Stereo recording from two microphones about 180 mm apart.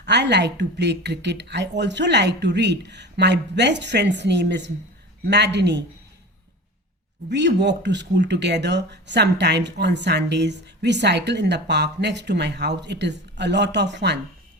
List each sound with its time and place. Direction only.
0.0 s speech: 70° right (ahead or behind)
7.3 s speech: 75° right (ahead or behind)